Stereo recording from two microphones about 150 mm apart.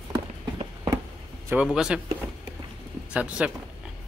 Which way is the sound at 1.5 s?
5° right (ahead or behind).